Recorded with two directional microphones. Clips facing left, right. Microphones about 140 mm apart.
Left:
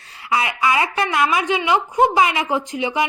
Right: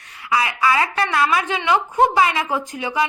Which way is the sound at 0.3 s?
25° left (ahead or behind).